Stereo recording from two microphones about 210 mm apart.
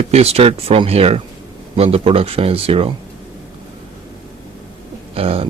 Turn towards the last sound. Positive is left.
turn(degrees=-25)  # may be behind; listen again after turning